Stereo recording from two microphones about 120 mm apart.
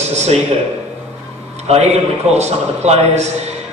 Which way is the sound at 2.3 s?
65° right (ahead or behind).